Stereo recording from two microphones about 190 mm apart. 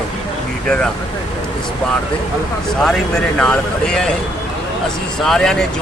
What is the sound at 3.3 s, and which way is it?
Speech, 5° left (ahead or behind).